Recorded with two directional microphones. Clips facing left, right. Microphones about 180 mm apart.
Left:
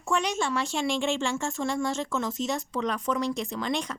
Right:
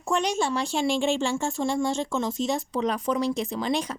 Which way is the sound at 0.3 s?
35° right (ahead or behind).